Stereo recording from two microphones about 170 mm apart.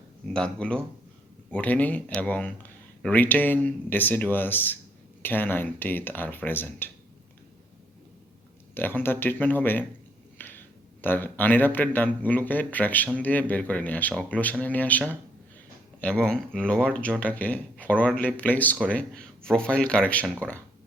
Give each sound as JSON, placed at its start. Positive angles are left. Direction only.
{"t": 0.3, "sound": "speech", "side_deg": 5}
{"t": 8.7, "sound": "speech", "side_deg": 10}
{"t": 10.3, "sound": "finger snapping", "side_deg": 10}
{"t": 11.0, "sound": "speech", "side_deg": 10}